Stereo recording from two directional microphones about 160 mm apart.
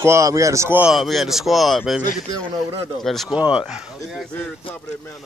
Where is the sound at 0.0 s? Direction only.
20° right (ahead or behind).